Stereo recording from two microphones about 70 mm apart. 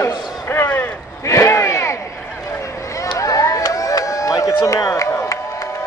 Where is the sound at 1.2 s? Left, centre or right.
Left.